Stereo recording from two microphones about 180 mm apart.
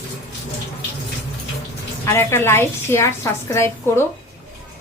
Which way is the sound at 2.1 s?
15° left (ahead or behind).